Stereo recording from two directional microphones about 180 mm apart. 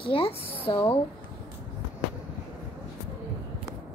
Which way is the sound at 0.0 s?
30° left (ahead or behind).